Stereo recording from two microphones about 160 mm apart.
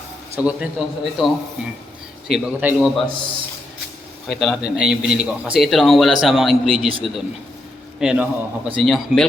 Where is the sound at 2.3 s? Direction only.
10° right (ahead or behind).